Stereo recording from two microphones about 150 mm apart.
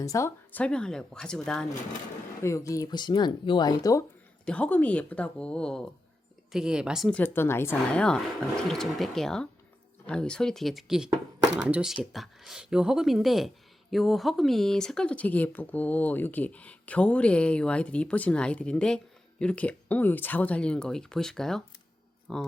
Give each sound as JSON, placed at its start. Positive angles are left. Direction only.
{"t": 0.0, "sound": "speech", "side_deg": 20}
{"t": 2.4, "sound": "speech", "side_deg": 20}
{"t": 4.4, "sound": "speech", "side_deg": 10}
{"t": 7.1, "sound": "speech", "side_deg": 15}